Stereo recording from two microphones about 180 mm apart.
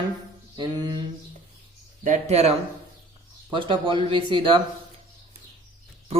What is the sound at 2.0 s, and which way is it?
Speech, 35° right (ahead or behind).